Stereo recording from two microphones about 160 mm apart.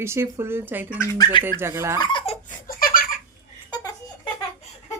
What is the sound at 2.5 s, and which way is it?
Laughter, 60° left (ahead or behind).